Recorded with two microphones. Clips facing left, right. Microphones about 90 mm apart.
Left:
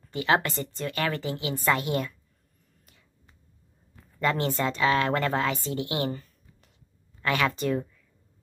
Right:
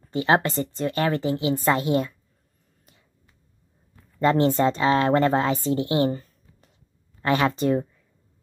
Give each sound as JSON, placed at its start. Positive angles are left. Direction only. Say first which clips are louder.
{"t": 0.0, "sound": "a woman's voice", "louder": "right 4 dB", "side_deg": -30}
{"t": 4.2, "sound": "a woman's voice", "louder": "right 7 dB", "side_deg": -30}